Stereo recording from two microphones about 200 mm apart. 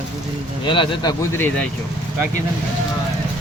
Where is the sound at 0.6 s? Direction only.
25° left (ahead or behind).